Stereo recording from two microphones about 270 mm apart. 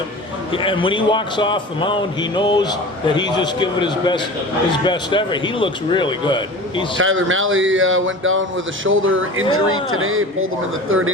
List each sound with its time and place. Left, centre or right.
0.5 s a man's voice: centre
6.9 s a man's voice: right